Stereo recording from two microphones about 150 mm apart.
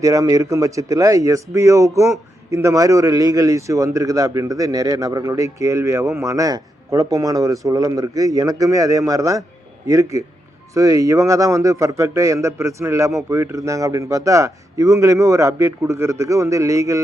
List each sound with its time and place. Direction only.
0.0 s speech: 20° right (ahead or behind)